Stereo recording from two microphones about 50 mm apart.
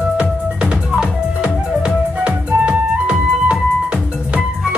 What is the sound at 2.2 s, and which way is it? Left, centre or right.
Music, right.